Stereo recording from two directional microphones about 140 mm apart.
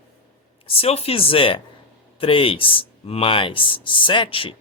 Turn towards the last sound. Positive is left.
turn(degrees=40)  # may be behind; listen again after turning